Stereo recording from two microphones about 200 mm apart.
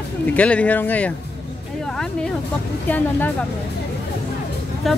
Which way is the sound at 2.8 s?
10° left (ahead or behind).